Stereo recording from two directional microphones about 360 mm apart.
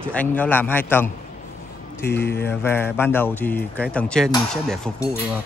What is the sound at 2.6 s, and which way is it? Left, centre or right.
Speech, centre.